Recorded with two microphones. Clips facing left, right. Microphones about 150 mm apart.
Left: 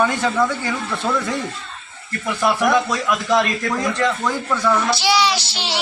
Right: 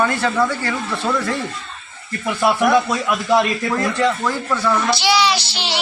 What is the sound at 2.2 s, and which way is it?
Speech, 10° right (ahead or behind).